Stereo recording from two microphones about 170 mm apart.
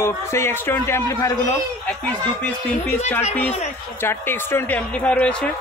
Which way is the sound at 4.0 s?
15° left (ahead or behind).